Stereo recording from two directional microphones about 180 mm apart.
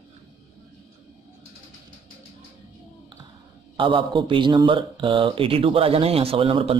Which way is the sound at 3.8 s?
30° right (ahead or behind).